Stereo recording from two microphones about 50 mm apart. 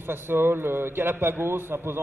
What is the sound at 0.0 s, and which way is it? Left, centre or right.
A man's voice, right.